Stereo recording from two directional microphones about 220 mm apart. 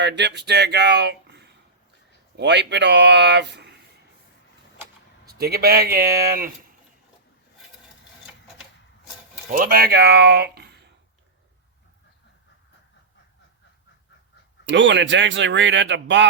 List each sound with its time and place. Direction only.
0.0 s speech: 50° right (ahead or behind)
5.3 s speech: 45° right (ahead or behind)
9.5 s speech: 40° right (ahead or behind)
14.6 s speech: 55° right (ahead or behind)